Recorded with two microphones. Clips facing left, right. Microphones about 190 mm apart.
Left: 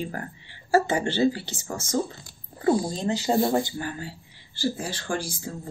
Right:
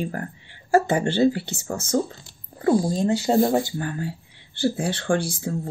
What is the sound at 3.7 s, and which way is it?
Speech, 55° right (ahead or behind).